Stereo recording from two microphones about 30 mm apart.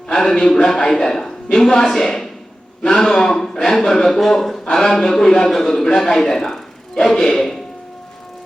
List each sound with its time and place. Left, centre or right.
0.1 s a man's voice: centre